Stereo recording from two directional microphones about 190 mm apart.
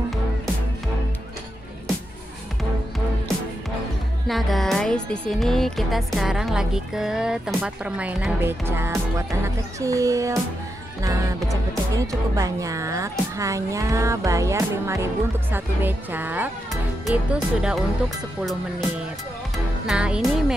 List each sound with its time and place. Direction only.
4.3 s speech: centre (ahead or behind); by 10.4 s 15° right (ahead or behind)
11.0 s music: 15° right (ahead or behind)
11.4 s speech: 20° right (ahead or behind)
13.4 s music: 15° right (ahead or behind)
17.0 s speech: 5° right (ahead or behind)
19.9 s speech: 5° right (ahead or behind)